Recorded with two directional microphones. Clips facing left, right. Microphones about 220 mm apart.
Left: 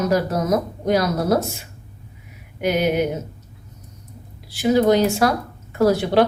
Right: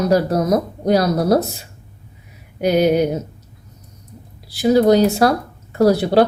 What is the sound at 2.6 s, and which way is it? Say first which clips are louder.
Speech: right 5 dB; 35° right (ahead or behind).